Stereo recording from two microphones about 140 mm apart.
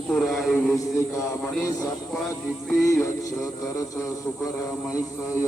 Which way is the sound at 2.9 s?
25° left (ahead or behind).